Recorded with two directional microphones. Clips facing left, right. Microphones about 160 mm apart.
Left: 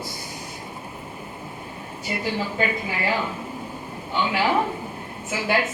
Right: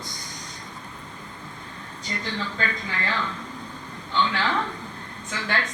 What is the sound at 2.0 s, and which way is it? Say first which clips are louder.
A woman's voice: left 5 dB; 10° left (ahead or behind).